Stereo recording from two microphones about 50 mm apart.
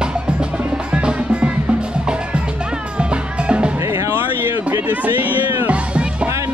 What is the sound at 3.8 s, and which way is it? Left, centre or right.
Music, right.